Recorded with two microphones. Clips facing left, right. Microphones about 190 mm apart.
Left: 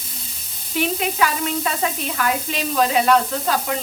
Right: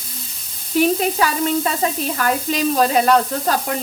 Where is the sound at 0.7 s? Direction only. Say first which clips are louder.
Right 6 dB; 40° right (ahead or behind).